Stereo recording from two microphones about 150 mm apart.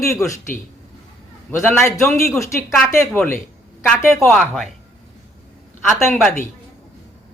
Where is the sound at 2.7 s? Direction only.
5° left (ahead or behind).